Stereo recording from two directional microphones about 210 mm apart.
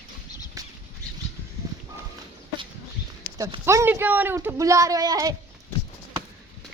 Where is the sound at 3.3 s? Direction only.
15° right (ahead or behind).